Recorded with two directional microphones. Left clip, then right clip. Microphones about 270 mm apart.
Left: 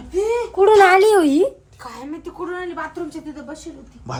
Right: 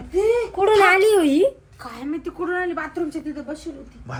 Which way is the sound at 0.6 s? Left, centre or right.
Left.